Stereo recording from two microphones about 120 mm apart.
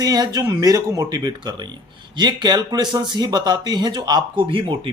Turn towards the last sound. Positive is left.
turn(degrees=-50)  # may be behind; listen again after turning